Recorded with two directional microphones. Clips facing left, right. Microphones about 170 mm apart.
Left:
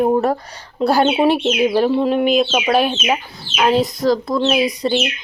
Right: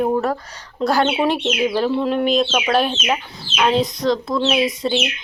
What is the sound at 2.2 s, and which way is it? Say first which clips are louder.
Speech: left 2 dB; 5° left (ahead or behind).